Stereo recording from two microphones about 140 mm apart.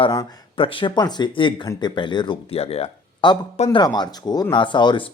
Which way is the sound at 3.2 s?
35° left (ahead or behind).